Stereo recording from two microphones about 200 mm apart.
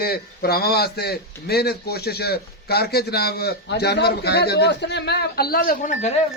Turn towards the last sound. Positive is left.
turn(degrees=40)  # may be behind; listen again after turning